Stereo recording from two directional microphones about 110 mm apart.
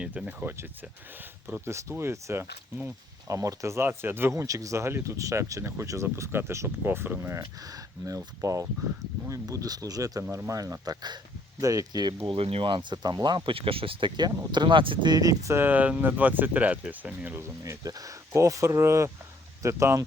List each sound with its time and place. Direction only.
0.0 s speech: 10° right (ahead or behind)
17.6 s speech: 30° right (ahead or behind)